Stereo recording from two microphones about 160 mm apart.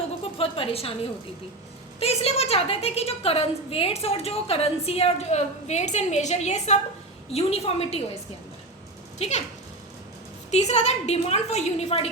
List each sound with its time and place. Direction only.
0.2 s a sound: 35° left (ahead or behind)
2.0 s a woman's voice: 40° left (ahead or behind)
9.1 s speech: 40° left (ahead or behind)
10.5 s a woman's voice: 45° left (ahead or behind)